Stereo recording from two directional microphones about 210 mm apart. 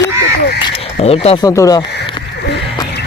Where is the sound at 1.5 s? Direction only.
15° left (ahead or behind).